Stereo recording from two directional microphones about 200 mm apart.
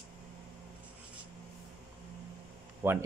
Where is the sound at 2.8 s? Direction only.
10° right (ahead or behind).